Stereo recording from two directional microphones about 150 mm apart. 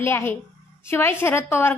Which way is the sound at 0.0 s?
15° left (ahead or behind).